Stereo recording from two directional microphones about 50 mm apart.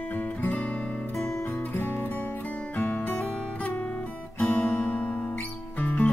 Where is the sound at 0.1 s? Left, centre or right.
Left.